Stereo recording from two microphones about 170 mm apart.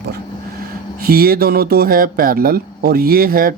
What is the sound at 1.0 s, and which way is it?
Speech, 60° right (ahead or behind).